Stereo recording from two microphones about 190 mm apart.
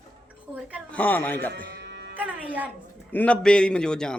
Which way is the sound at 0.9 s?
10° left (ahead or behind).